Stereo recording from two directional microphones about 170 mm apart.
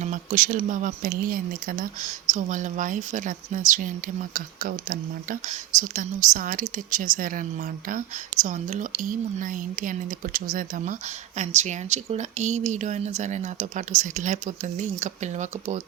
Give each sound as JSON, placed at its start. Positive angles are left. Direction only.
{"t": 0.0, "sound": "speech", "side_deg": -50}